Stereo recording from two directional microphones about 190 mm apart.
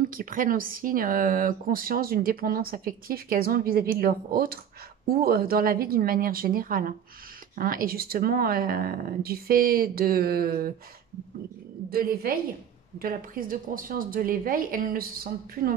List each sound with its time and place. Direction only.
0.1 s speech: 45° right (ahead or behind)
11.9 s speech: 50° right (ahead or behind)